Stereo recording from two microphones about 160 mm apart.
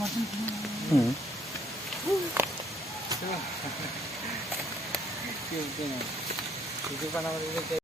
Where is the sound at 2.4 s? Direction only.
15° right (ahead or behind).